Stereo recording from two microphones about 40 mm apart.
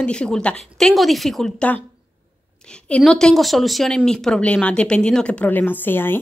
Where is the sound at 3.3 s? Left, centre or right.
Centre.